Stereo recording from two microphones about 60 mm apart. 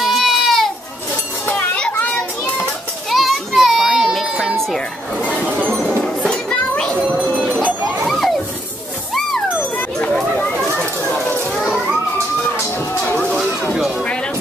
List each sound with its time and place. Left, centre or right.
0.0 s baby cry: centre
1.5 s children playing: left
3.1 s children playing: centre
5.7 s children playing: centre
7.4 s sheep: right
8.1 s children playing: centre
10.3 s children playing: left